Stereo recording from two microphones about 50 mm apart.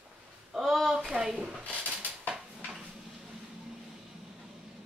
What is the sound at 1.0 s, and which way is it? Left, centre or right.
Speech, centre.